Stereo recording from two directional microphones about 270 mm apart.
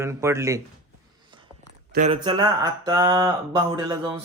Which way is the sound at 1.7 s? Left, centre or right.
Right.